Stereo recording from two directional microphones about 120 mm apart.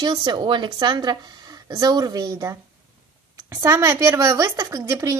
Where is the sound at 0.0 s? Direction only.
40° right (ahead or behind).